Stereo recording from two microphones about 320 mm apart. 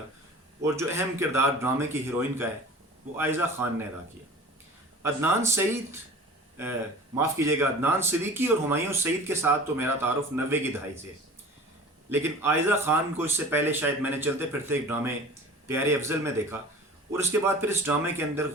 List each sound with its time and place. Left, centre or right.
0.6 s speech: centre
5.0 s speech: centre
7.2 s speech: centre
12.1 s speech: centre